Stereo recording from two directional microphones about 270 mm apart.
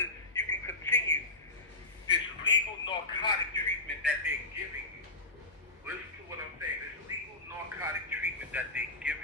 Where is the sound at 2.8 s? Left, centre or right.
Centre.